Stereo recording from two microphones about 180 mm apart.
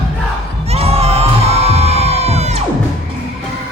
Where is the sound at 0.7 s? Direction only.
35° right (ahead or behind).